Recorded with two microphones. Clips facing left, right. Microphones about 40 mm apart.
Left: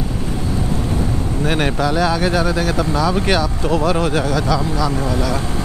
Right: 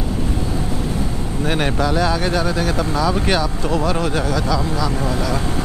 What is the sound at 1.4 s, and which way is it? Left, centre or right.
Speech, centre.